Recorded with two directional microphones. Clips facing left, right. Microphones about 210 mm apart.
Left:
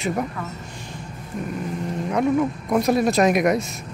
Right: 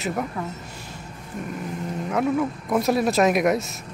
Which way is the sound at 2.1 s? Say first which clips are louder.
Left 2 dB; centre (ahead or behind).